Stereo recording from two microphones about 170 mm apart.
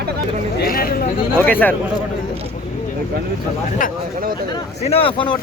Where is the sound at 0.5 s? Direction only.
60° left (ahead or behind).